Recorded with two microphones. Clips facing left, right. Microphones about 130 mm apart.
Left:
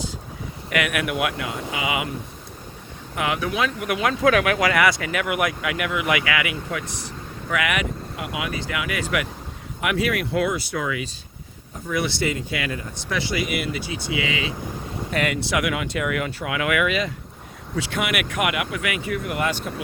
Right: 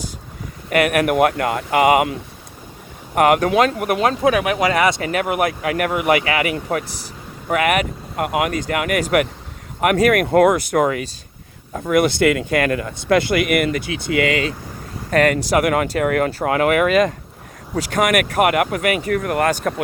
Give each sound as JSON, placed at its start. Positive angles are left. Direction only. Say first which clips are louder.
{"t": 0.7, "sound": "speech", "louder": "right 8 dB", "side_deg": -40}
{"t": 3.2, "sound": "speech", "louder": "right 10 dB", "side_deg": -60}
{"t": 3.8, "sound": "speech", "louder": "right 5 dB", "side_deg": -40}
{"t": 4.2, "sound": "speech", "louder": "right 2 dB", "side_deg": -25}
{"t": 5.0, "sound": "speech", "louder": "right 4 dB", "side_deg": -40}
{"t": 8.1, "sound": "speech", "louder": "right 13 dB", "side_deg": -55}
{"t": 11.7, "sound": "speech", "louder": "right 9 dB", "side_deg": -80}
{"t": 11.9, "sound": "speech", "louder": "right 9 dB", "side_deg": -55}